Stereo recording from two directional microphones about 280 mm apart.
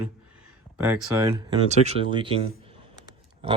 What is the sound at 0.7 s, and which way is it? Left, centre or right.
Speech, centre.